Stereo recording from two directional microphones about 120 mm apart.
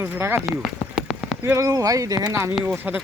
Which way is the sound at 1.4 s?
25° right (ahead or behind).